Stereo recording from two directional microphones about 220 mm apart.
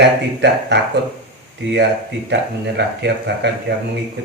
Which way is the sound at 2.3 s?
50° right (ahead or behind).